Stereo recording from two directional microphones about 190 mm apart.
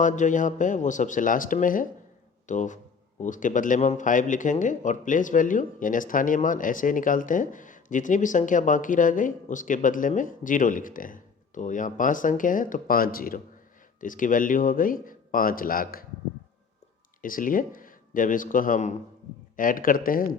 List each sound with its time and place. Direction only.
0.0 s a man's voice: 40° left (ahead or behind)
17.2 s a man's voice: 45° left (ahead or behind)